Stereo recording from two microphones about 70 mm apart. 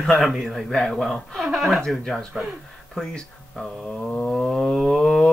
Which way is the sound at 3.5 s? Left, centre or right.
Centre.